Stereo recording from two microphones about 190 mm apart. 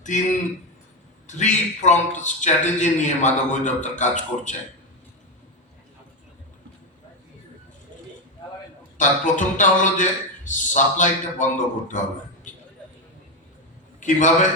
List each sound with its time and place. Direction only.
1.3 s a man's voice: 40° left (ahead or behind)
9.0 s a man's voice: 40° left (ahead or behind)
12.5 s a sound: 40° left (ahead or behind)
14.0 s a man's voice: 40° left (ahead or behind)